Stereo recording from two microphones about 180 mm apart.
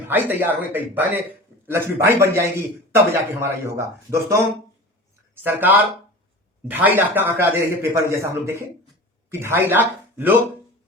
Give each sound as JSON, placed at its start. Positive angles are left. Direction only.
{"t": 0.1, "sound": "a man's voice", "side_deg": -10}
{"t": 5.4, "sound": "a man's voice", "side_deg": -10}